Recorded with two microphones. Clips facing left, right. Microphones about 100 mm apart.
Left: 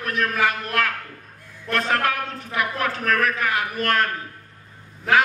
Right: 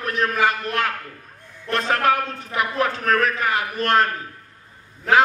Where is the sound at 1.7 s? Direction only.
30° right (ahead or behind).